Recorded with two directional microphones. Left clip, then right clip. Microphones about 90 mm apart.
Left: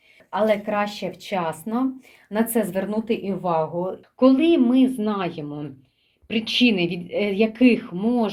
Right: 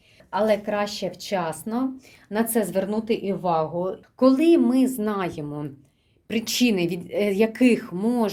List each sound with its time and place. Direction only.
0.3 s speech: 20° right (ahead or behind)
6.2 s speech: 45° right (ahead or behind)